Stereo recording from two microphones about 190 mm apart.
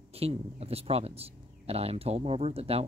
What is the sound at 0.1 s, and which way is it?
Speech, 30° right (ahead or behind).